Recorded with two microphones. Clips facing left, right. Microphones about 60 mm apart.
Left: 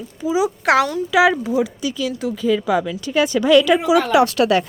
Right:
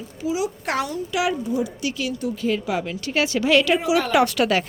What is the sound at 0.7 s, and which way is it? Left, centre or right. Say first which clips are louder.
Speech: left 11 dB; left.